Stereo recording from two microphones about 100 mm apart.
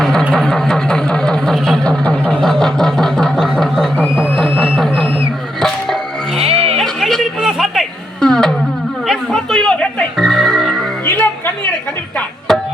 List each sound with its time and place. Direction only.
0.0 s a sound: 5° left (ahead or behind)
5.5 s music: centre (ahead or behind)
6.4 s a sound: 80° right
6.7 s chatter: centre (ahead or behind)
8.2 s music: 5° left (ahead or behind)
11.0 s music: 20° left (ahead or behind)